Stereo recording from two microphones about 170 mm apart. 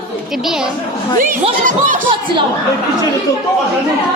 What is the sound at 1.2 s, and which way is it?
Speech, 50° right (ahead or behind).